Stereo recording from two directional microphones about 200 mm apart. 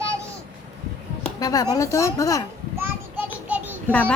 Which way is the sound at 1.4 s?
20° left (ahead or behind).